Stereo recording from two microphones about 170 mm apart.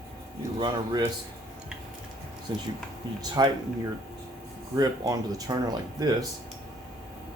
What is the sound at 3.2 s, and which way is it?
Speech, 25° right (ahead or behind).